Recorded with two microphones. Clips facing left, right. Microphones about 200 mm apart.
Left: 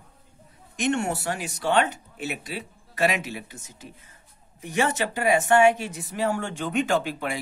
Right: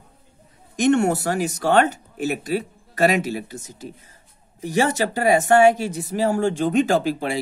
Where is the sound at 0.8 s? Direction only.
40° right (ahead or behind).